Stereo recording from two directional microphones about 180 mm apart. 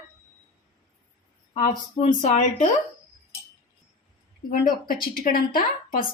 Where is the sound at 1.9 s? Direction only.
40° left (ahead or behind).